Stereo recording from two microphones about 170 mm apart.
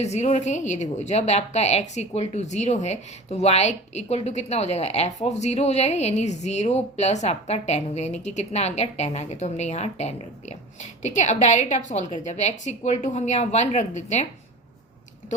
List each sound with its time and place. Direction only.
0.0 s a woman's voice: 40° left (ahead or behind)